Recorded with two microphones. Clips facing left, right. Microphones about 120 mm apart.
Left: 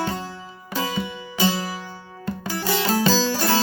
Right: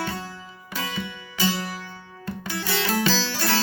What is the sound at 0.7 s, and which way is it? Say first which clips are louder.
Music: left 5 dB; 30° left (ahead or behind).